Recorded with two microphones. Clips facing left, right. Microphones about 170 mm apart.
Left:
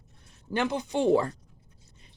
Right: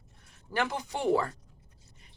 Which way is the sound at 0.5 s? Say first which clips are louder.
Left 5 dB; 20° left (ahead or behind).